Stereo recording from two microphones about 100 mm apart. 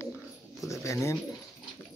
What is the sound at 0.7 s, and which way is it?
Speech, 30° left (ahead or behind).